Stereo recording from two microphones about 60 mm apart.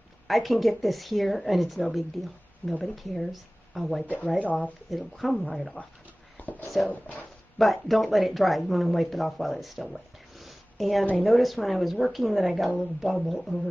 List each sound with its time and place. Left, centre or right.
0.3 s speech: centre
4.0 s speech: left
4.9 s speech: centre
6.3 s a sound: left
6.9 s speech: left
7.5 s speech: centre